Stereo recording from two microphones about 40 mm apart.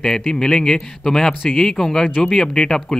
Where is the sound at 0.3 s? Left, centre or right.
Centre.